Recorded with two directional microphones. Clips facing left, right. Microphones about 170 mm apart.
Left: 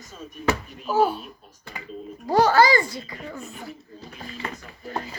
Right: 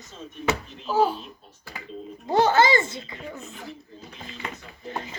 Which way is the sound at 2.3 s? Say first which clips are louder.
Left 2 dB; 20° right (ahead or behind).